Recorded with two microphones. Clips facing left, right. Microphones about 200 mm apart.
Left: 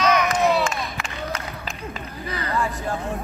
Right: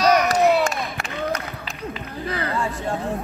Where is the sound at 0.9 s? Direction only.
40° right (ahead or behind).